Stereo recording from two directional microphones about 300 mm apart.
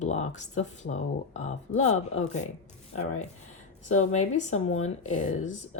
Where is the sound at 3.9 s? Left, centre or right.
Left.